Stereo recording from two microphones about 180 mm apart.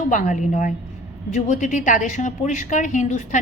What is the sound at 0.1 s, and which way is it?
A woman's voice, 45° left (ahead or behind).